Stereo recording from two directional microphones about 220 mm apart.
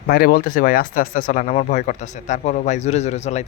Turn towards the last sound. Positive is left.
turn(degrees=30)  # may be behind; listen again after turning